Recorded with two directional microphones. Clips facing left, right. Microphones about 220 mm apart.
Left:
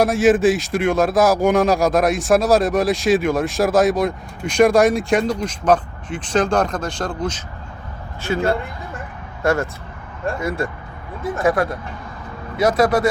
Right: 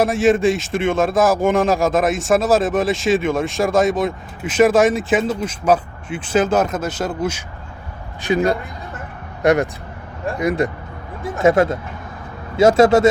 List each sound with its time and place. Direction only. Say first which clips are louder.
0.0 s speech: left 1 dB; centre (ahead or behind); by 13.1 s 25° right (ahead or behind)